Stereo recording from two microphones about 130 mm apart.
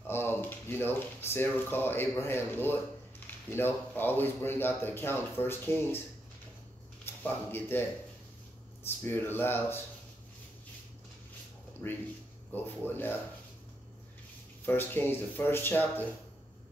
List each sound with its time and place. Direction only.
0.0 s speech: 15° left (ahead or behind)
7.1 s speech: 15° left (ahead or behind)
8.8 s speech: 15° left (ahead or behind)
12.5 s speech: 15° left (ahead or behind)
14.7 s speech: 15° left (ahead or behind)